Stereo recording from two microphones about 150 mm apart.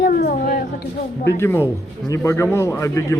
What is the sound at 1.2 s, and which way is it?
A man's voice, 15° left (ahead or behind).